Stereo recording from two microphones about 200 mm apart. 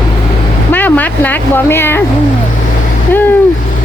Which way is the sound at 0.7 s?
10° left (ahead or behind).